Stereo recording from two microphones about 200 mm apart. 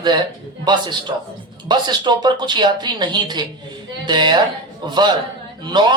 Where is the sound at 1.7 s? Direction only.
20° right (ahead or behind).